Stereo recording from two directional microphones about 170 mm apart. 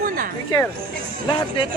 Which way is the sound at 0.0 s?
55° right (ahead or behind).